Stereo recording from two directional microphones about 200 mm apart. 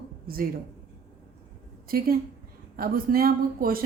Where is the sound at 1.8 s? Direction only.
50° right (ahead or behind).